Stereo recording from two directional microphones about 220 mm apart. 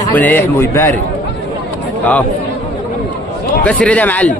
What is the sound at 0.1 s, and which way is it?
Speech, 10° left (ahead or behind).